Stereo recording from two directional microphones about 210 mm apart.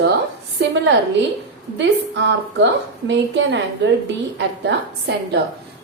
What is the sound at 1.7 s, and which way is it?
A woman's voice, 55° right (ahead or behind).